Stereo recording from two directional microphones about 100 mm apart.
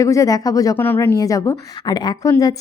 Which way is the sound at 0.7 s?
20° left (ahead or behind).